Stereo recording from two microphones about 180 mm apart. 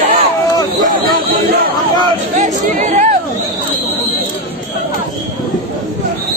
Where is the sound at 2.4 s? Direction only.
45° right (ahead or behind).